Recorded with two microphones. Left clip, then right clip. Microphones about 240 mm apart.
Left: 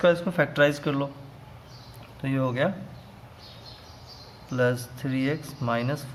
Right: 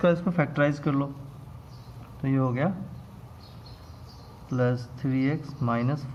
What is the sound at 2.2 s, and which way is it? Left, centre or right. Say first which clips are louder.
Speech: left 2 dB; left.